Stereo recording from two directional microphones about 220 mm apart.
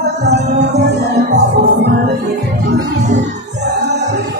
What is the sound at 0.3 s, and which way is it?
Music, 30° right (ahead or behind).